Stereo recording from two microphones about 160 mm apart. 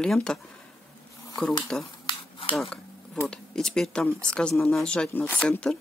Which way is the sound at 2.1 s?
35° left (ahead or behind).